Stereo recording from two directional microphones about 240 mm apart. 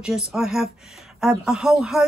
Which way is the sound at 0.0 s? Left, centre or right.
Centre.